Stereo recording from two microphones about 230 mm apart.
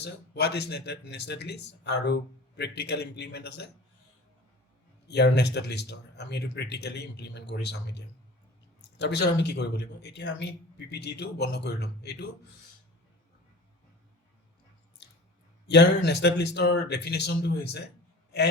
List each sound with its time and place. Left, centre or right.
0.0 s speech: left
5.0 s speech: left
15.6 s speech: left